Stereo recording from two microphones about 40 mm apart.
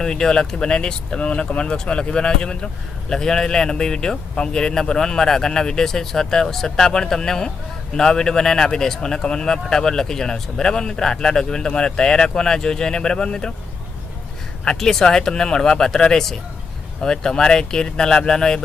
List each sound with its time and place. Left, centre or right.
0.0 s a man's voice: centre
14.8 s a man's voice: centre